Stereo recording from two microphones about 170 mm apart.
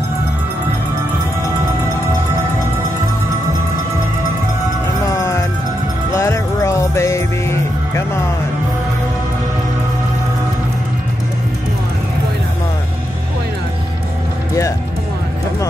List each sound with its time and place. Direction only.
5.0 s music: 20° left (ahead or behind)